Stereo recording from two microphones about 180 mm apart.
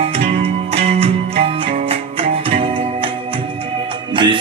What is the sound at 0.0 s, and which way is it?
Music, 35° right (ahead or behind).